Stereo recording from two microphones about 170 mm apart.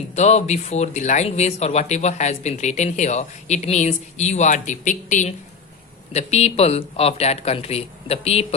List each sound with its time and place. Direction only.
0.2 s speech: 40° left (ahead or behind)